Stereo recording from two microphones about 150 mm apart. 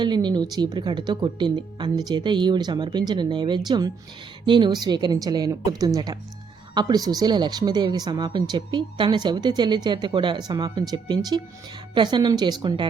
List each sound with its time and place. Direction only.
0.0 s a woman's voice: 30° right (ahead or behind)